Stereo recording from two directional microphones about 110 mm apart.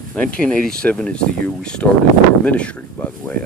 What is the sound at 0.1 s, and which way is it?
Speech, 10° left (ahead or behind).